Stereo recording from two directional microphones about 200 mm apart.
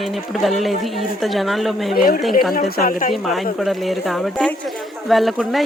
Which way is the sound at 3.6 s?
Centre (ahead or behind).